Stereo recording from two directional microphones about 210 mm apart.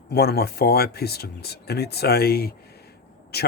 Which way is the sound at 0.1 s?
50° left (ahead or behind).